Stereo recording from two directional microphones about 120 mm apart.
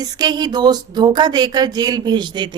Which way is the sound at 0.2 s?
35° right (ahead or behind).